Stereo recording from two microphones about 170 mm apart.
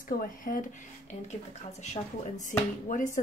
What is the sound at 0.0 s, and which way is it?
Speech, 55° left (ahead or behind).